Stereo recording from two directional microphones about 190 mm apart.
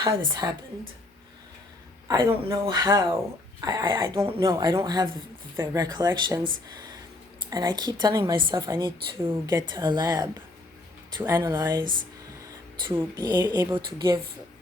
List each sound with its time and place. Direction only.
0.4 s speech: 15° right (ahead or behind)
2.0 s a woman's voice: 15° right (ahead or behind)
7.5 s a woman's voice: 20° right (ahead or behind)
12.9 s a woman's voice: 15° right (ahead or behind)